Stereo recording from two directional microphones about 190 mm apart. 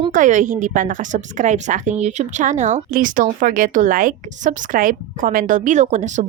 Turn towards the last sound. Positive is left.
turn(degrees=-40)  # may be behind; listen again after turning